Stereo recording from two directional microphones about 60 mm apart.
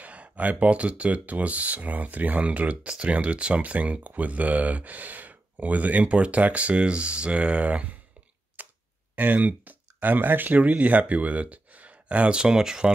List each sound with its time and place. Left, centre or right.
0.0 s speech: right
8.6 s a sound: right
9.1 s speech: right